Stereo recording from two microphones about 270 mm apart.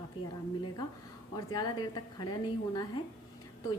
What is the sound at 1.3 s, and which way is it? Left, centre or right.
A woman's voice, centre.